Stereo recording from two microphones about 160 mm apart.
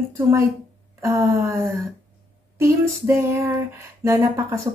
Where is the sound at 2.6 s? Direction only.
15° right (ahead or behind).